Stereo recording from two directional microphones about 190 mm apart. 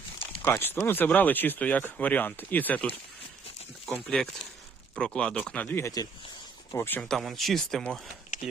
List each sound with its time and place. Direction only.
0.4 s speech: 10° left (ahead or behind)